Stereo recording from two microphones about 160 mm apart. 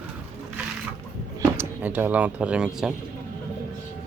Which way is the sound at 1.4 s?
15° right (ahead or behind).